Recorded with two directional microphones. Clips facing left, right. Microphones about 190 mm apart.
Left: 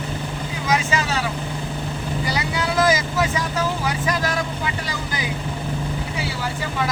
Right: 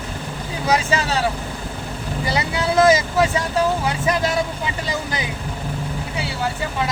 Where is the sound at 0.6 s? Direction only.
35° right (ahead or behind).